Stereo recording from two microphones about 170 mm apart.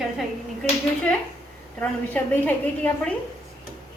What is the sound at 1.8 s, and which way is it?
A woman's voice, 10° left (ahead or behind).